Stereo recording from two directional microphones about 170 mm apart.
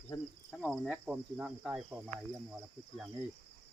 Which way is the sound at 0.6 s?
Centre (ahead or behind).